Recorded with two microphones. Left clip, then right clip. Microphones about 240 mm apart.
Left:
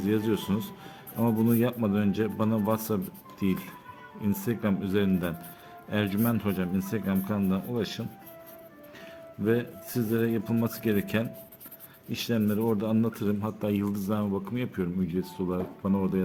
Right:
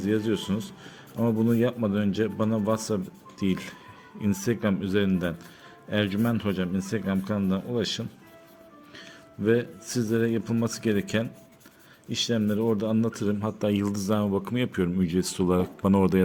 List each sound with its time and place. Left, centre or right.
0.0 s a man's voice: centre
9.4 s speech: centre; by 16.2 s right